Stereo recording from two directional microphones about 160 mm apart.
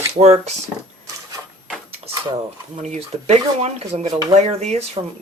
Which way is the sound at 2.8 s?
45° right (ahead or behind).